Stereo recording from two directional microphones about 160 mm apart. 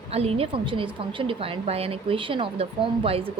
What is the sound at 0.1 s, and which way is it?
A woman's voice, 40° right (ahead or behind).